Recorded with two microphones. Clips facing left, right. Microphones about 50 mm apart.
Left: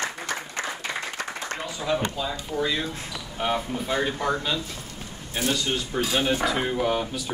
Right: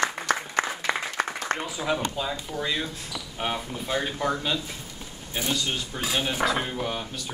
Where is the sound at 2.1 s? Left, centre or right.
Right.